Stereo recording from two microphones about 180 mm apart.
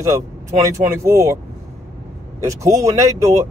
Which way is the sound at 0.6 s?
15° right (ahead or behind).